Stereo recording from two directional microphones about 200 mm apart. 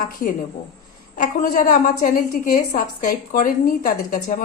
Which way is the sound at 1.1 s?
40° left (ahead or behind).